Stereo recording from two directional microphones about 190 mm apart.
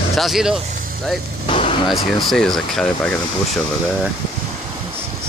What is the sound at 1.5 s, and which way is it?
Vehicle, 30° left (ahead or behind).